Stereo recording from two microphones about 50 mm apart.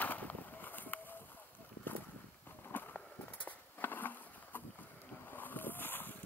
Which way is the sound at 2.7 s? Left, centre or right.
Left.